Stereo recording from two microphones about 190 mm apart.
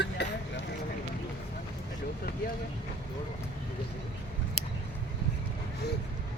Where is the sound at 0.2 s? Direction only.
65° left (ahead or behind).